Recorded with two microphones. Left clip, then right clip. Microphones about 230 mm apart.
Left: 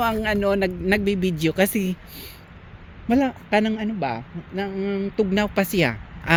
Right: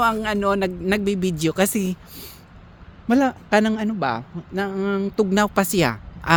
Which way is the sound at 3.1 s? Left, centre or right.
Right.